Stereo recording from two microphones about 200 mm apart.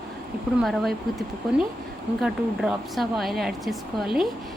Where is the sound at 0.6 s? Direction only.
Centre (ahead or behind).